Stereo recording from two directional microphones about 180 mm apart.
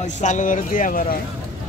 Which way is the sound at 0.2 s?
45° left (ahead or behind).